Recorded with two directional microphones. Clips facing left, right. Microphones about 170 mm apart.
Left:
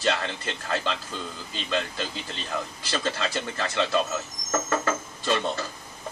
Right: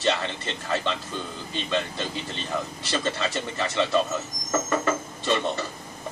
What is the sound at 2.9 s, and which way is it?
Speech, 15° right (ahead or behind).